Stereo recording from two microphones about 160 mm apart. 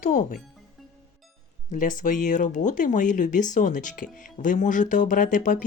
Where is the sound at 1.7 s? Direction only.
55° left (ahead or behind).